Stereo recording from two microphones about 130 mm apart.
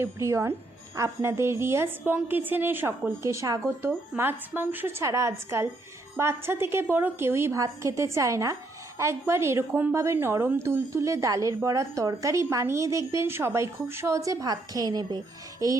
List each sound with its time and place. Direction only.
0.0 s a woman's voice: 20° right (ahead or behind)